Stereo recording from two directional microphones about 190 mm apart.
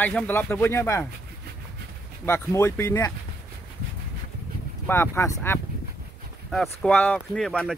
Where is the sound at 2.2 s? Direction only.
10° left (ahead or behind).